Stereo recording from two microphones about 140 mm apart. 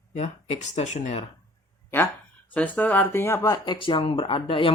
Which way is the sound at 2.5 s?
10° left (ahead or behind).